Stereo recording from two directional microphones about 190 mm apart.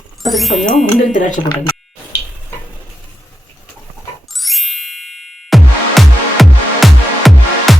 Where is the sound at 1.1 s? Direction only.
45° left (ahead or behind).